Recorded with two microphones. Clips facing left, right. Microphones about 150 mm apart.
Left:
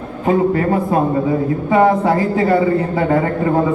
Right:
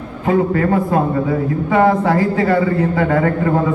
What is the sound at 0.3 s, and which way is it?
A man's voice, 25° left (ahead or behind).